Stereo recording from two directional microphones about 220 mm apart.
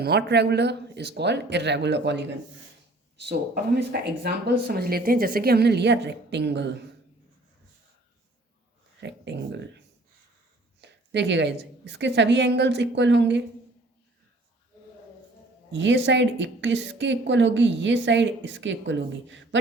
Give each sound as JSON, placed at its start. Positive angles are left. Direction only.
{"t": 0.0, "sound": "speech", "side_deg": -50}
{"t": 9.0, "sound": "a woman's voice", "side_deg": -50}
{"t": 15.7, "sound": "a woman's voice", "side_deg": -55}